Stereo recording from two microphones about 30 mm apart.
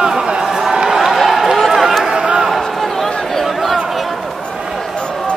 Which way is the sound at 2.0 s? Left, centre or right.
Right.